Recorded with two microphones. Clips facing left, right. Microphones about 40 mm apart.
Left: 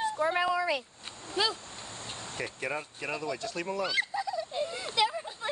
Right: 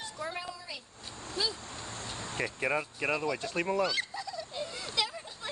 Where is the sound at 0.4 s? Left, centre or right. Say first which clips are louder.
Left 13 dB; left.